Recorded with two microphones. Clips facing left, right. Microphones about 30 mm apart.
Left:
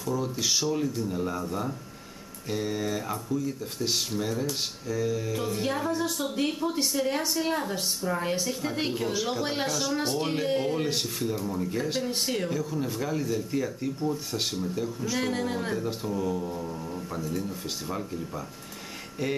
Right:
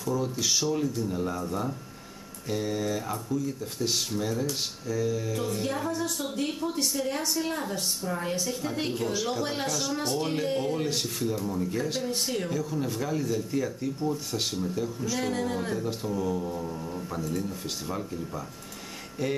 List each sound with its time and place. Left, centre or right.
0.0 s speech: centre